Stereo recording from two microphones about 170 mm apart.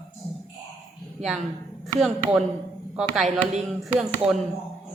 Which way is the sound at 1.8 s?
Centre (ahead or behind).